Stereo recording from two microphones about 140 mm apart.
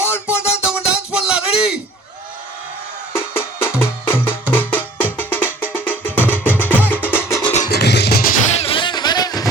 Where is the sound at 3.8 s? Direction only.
15° left (ahead or behind).